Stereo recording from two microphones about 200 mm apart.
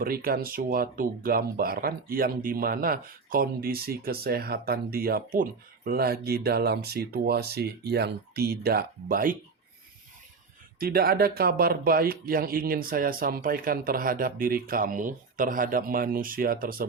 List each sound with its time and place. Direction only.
0.0 s speech: 45° right (ahead or behind)
10.8 s speech: 50° right (ahead or behind)